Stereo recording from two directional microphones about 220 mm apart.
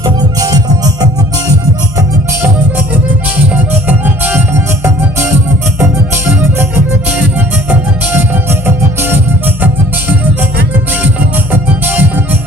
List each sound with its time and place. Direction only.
0.0 s music: 15° right (ahead or behind)
3.5 s music: 5° right (ahead or behind)
7.3 s music: 10° right (ahead or behind)
11.9 s music: 10° right (ahead or behind)